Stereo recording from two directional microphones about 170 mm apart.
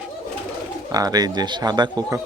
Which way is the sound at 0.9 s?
20° right (ahead or behind).